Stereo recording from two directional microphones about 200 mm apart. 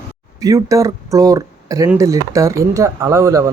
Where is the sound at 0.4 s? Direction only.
15° right (ahead or behind).